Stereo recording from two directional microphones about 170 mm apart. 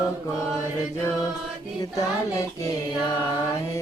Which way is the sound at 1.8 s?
20° left (ahead or behind).